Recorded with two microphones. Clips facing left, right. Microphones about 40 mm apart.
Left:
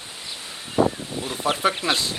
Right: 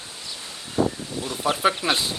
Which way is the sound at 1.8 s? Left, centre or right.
Centre.